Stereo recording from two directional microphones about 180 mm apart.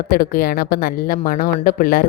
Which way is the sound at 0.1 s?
55° left (ahead or behind).